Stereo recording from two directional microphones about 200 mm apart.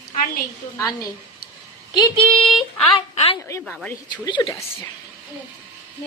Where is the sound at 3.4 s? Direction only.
15° left (ahead or behind).